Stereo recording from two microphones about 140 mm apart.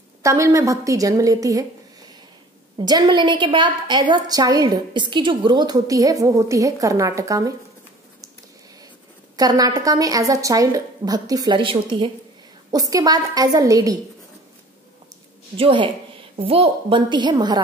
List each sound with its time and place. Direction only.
0.2 s a woman's voice: 20° right (ahead or behind)
2.8 s a woman's voice: 30° right (ahead or behind)
9.4 s a woman's voice: 25° right (ahead or behind)
12.9 s a woman's voice: 25° right (ahead or behind)
15.5 s a woman's voice: 40° right (ahead or behind)